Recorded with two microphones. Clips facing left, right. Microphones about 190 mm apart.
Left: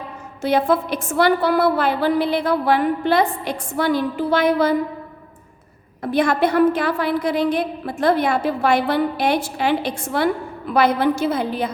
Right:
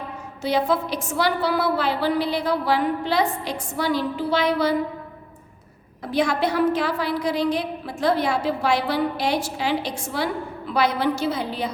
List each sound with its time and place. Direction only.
0.4 s a woman's voice: 55° left (ahead or behind)
6.0 s a woman's voice: 55° left (ahead or behind)